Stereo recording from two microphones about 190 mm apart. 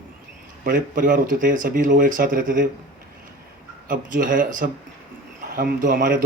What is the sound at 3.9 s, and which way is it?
Speech, 45° right (ahead or behind).